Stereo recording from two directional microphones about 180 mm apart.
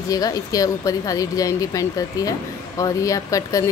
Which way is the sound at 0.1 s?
20° left (ahead or behind).